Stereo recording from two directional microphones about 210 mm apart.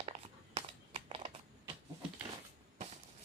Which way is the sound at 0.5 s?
30° right (ahead or behind).